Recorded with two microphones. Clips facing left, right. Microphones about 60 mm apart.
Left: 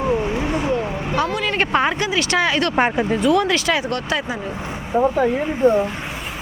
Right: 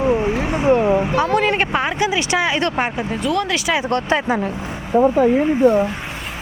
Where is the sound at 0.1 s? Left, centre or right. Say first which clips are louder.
Right 2 dB; centre.